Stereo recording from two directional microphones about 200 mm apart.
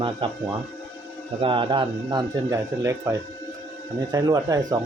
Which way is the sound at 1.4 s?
25° right (ahead or behind).